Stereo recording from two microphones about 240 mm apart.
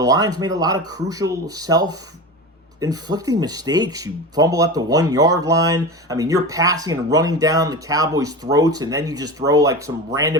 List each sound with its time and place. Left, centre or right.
0.0 s speech: centre